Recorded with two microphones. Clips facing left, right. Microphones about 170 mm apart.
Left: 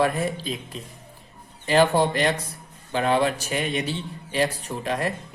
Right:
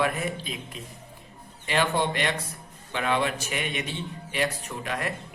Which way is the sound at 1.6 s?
35° left (ahead or behind).